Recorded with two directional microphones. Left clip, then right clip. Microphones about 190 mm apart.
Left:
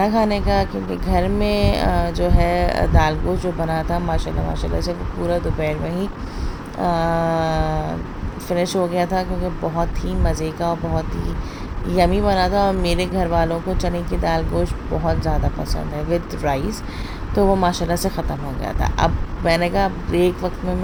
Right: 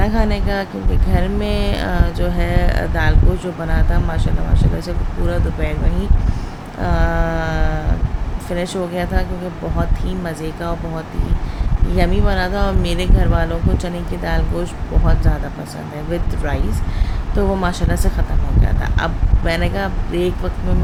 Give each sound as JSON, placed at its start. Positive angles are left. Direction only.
{"t": 0.0, "sound": "speech", "side_deg": 15}
{"t": 5.3, "sound": "speech", "side_deg": 15}